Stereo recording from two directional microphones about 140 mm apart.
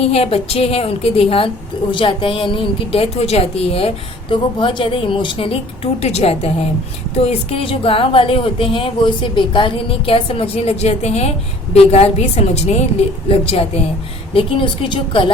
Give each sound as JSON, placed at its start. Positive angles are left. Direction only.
{"t": 0.0, "sound": "a woman's voice", "side_deg": 45}